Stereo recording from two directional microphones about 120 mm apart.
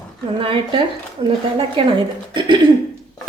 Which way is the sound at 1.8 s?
45° right (ahead or behind).